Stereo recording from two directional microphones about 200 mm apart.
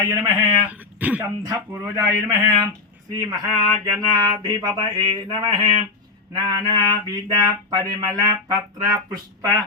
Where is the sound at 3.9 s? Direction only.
20° right (ahead or behind).